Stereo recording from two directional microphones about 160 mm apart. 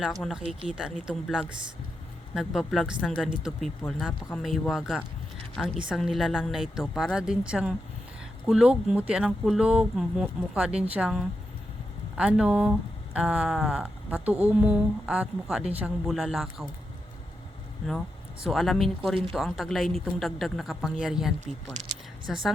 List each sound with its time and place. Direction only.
0.0 s speech: centre (ahead or behind)
18.4 s speech: centre (ahead or behind)
21.7 s speech: 50° right (ahead or behind)
22.3 s speech: centre (ahead or behind)